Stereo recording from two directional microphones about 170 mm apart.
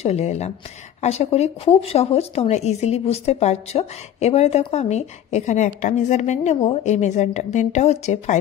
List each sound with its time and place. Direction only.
0.0 s speech: 40° left (ahead or behind)